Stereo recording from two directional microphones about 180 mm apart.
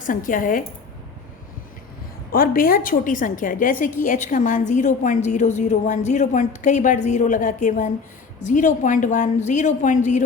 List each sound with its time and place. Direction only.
0.0 s a woman's voice: 50° left (ahead or behind)
2.3 s a woman's voice: 50° left (ahead or behind)